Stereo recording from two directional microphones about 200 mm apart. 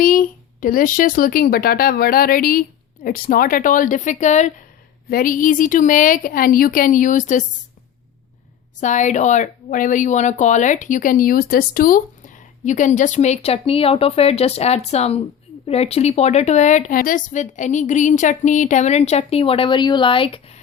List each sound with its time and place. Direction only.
0.0 s speech: 45° left (ahead or behind)
8.8 s speech: 35° left (ahead or behind)